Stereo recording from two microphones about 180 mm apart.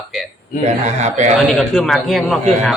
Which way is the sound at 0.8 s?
40° right (ahead or behind).